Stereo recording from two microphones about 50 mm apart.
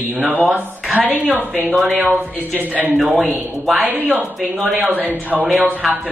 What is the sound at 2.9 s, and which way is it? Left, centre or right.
Speech, centre.